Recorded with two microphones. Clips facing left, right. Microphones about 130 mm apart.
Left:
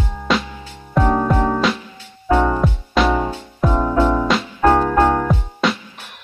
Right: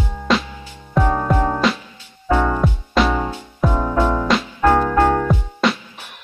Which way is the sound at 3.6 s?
15° left (ahead or behind).